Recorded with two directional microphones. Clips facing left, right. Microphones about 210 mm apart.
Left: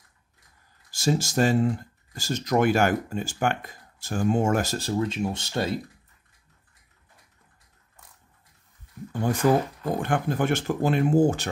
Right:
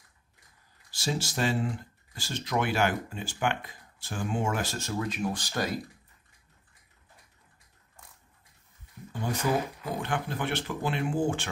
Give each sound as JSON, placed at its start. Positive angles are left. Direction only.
{"t": 0.9, "sound": "speech", "side_deg": 45}
{"t": 9.4, "sound": "speech", "side_deg": 50}